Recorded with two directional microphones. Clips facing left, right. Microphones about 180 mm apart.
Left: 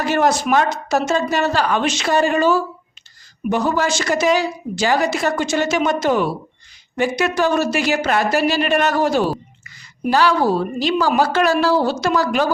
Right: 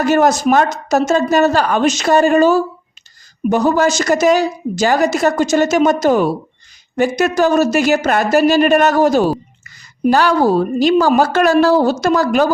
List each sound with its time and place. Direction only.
0.0 s a woman's voice: 45° right (ahead or behind)